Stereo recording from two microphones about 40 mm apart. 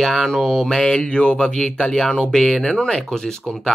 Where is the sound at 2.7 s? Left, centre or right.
Left.